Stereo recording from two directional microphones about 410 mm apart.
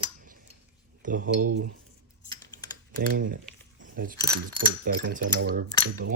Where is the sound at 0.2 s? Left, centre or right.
Centre.